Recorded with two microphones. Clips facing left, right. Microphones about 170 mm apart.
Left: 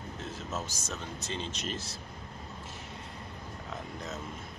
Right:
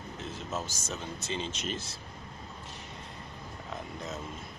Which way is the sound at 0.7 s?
Centre (ahead or behind).